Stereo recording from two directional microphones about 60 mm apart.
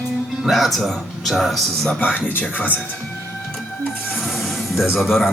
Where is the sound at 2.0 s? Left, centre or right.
Left.